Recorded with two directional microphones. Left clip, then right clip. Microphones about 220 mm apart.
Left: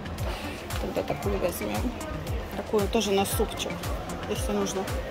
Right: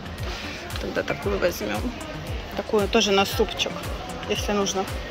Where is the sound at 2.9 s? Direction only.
5° left (ahead or behind).